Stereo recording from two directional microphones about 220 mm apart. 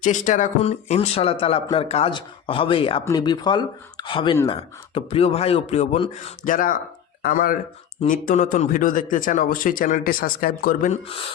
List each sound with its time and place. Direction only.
0.0 s a man's voice: 35° left (ahead or behind)